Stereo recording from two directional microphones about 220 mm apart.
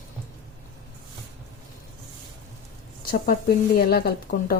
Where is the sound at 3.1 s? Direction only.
40° left (ahead or behind).